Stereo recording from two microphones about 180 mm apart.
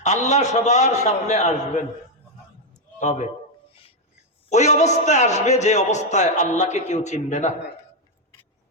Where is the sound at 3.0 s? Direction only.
40° left (ahead or behind).